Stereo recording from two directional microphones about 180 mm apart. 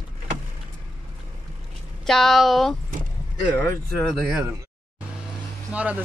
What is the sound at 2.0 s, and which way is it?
Speech, centre (ahead or behind).